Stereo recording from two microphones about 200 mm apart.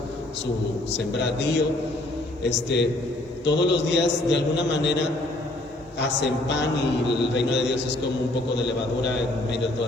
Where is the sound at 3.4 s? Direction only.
60° left (ahead or behind).